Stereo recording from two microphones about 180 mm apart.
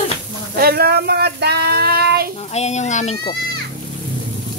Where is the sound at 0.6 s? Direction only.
60° right (ahead or behind).